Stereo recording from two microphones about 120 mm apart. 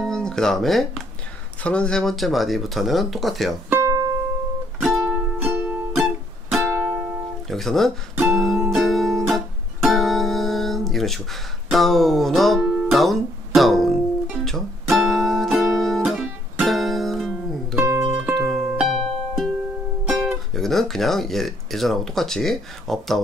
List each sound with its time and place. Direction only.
0.0 s speech: 5° left (ahead or behind)
3.8 s music: 25° right (ahead or behind)
4.8 s music: centre (ahead or behind)
5.4 s music: 15° right (ahead or behind)
7.4 s speech: centre (ahead or behind)
8.3 s music: centre (ahead or behind)
17.7 s music: 20° right (ahead or behind)
18.0 s music: 5° right (ahead or behind)
20.1 s speech: centre (ahead or behind)